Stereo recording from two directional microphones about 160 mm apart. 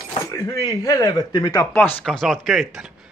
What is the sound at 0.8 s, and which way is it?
Speech, 20° left (ahead or behind).